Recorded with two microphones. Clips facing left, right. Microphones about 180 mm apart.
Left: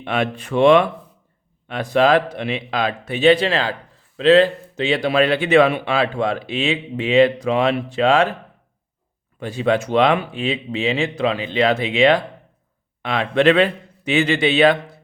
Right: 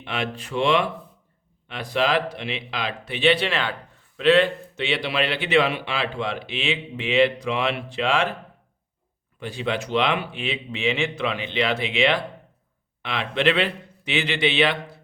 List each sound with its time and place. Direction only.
0.0 s a man's voice: 55° left (ahead or behind)
9.4 s a man's voice: 45° left (ahead or behind)